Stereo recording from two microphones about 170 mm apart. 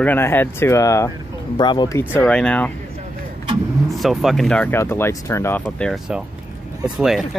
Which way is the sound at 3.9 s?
Centre (ahead or behind).